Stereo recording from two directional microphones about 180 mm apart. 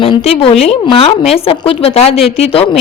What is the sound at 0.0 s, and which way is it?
A woman's voice, 35° left (ahead or behind).